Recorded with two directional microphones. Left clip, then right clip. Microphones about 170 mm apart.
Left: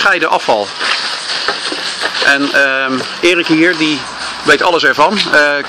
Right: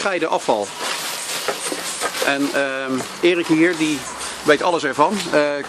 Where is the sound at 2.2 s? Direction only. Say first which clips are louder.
Left 10 dB; centre (ahead or behind).